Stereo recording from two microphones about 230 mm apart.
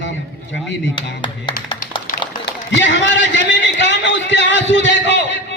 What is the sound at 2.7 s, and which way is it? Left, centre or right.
A man's voice, left.